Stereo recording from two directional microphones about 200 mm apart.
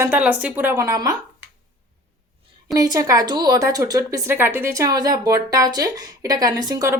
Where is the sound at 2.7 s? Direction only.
20° right (ahead or behind).